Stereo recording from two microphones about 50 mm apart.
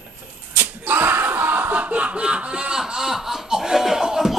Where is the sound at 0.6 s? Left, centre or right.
Right; by 4.3 s centre.